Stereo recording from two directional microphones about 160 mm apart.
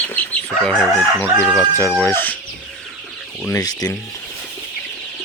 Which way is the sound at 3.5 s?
20° left (ahead or behind).